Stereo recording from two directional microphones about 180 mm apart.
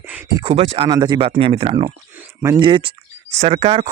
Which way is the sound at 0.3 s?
30° right (ahead or behind).